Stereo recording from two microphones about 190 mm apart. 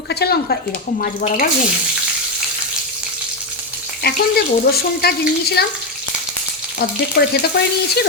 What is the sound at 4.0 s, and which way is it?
A woman's voice, 55° left (ahead or behind).